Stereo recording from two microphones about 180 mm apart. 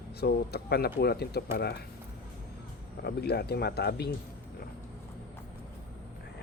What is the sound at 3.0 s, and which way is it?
Speech, 65° left (ahead or behind).